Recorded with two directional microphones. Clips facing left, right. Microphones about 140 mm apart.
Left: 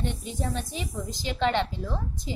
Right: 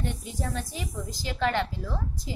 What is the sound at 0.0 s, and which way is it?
A woman's voice, 25° left (ahead or behind).